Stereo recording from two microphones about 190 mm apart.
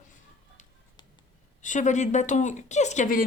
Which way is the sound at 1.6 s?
40° left (ahead or behind).